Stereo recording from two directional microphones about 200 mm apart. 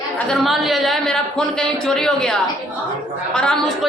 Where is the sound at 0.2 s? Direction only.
Centre (ahead or behind).